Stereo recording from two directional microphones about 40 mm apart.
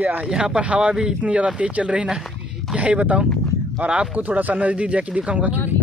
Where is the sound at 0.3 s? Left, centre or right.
Right.